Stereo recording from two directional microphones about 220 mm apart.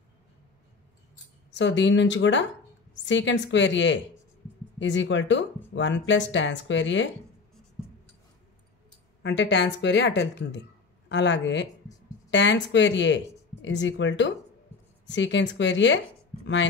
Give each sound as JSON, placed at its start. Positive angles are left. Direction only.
{"t": 1.5, "sound": "speech", "side_deg": 55}
{"t": 9.2, "sound": "speech", "side_deg": 50}